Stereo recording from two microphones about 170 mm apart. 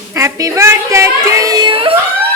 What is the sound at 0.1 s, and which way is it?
A woman's voice, 15° right (ahead or behind).